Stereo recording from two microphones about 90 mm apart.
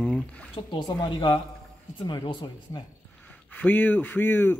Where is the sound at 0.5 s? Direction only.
65° left (ahead or behind).